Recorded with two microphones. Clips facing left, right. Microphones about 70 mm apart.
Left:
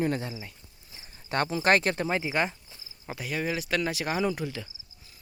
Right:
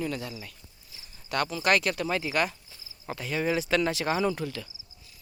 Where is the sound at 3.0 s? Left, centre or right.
Centre.